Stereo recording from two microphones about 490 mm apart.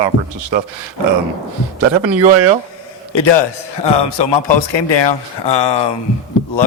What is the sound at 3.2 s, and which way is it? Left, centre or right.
A man's voice, left.